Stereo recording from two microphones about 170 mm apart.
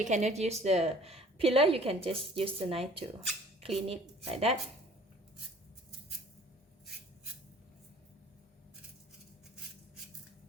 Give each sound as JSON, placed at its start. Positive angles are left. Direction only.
{"t": 0.0, "sound": "a woman's voice", "side_deg": -45}